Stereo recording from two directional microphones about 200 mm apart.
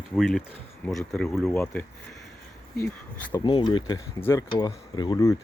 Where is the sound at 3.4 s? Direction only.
25° left (ahead or behind).